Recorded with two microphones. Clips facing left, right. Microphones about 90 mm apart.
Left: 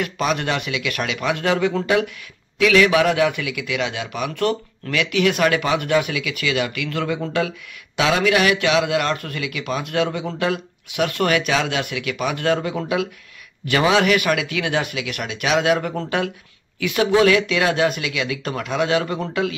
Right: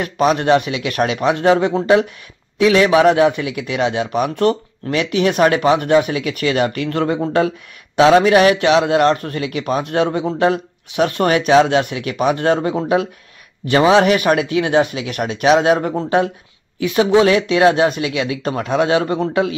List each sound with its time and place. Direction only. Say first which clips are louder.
0.0 s a man's voice: right 6 dB; 35° right (ahead or behind)